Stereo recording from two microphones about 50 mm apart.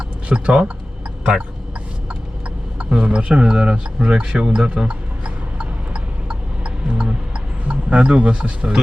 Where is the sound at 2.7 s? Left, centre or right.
Right.